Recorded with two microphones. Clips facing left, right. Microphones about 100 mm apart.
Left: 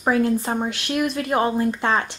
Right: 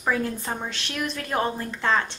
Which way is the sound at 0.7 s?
10° left (ahead or behind).